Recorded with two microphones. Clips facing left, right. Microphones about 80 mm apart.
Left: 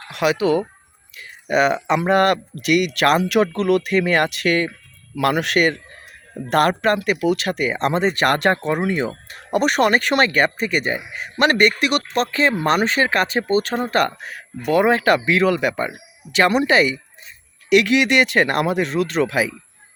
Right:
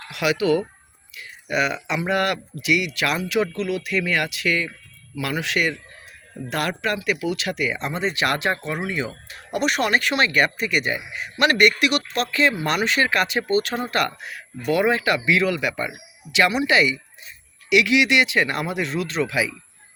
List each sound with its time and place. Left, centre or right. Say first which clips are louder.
0.1 s speech: left 2 dB; left
7.8 s speech: left 6 dB; left
10.4 s speech: left 2 dB; left